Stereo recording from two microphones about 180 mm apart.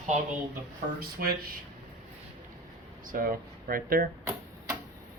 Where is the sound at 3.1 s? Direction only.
50° right (ahead or behind).